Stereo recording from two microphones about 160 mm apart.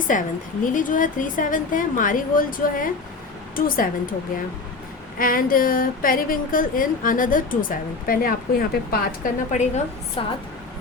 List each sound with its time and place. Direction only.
0.1 s a woman's voice: 55° left (ahead or behind)
5.2 s speech: 60° left (ahead or behind)
9.5 s a woman's voice: 45° left (ahead or behind)
10.2 s speech: 35° left (ahead or behind)